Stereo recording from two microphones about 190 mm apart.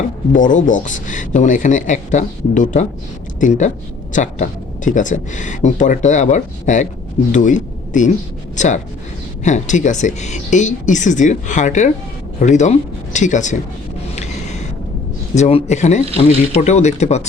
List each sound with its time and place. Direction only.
0.3 s a man's voice: 45° left (ahead or behind)
15.4 s speech: 35° left (ahead or behind)